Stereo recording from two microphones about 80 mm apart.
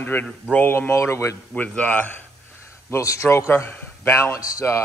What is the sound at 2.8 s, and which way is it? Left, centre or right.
A man's voice, left.